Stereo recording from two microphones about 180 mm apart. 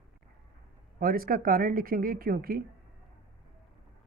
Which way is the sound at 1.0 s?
55° right (ahead or behind).